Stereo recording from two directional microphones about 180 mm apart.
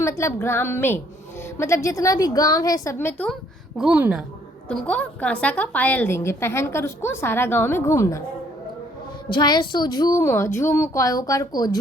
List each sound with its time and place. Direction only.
0.0 s a woman's voice: 15° left (ahead or behind)
3.8 s a woman's voice: 5° right (ahead or behind)
4.7 s a woman's voice: 5° left (ahead or behind)
9.3 s a woman's voice: 25° left (ahead or behind)